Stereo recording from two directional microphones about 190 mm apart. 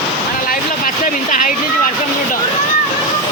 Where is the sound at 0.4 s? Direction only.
45° left (ahead or behind).